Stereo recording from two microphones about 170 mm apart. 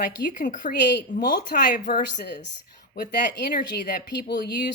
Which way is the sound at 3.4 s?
60° left (ahead or behind).